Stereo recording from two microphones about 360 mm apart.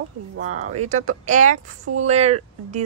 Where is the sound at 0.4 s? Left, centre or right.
Centre.